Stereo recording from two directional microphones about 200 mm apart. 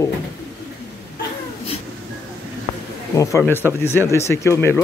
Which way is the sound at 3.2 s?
15° left (ahead or behind).